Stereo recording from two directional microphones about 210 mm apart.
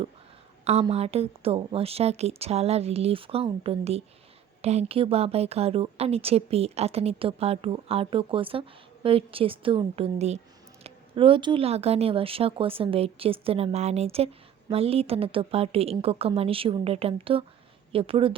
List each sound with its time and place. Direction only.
0.6 s speech: 30° right (ahead or behind)